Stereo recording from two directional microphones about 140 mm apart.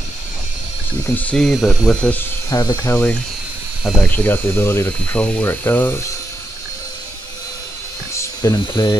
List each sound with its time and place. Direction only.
1.0 s speech: 10° left (ahead or behind)
2.5 s speech: 20° left (ahead or behind); by 4.2 s 5° left (ahead or behind)
4.2 s speech: 15° left (ahead or behind)
8.2 s speech: 25° left (ahead or behind)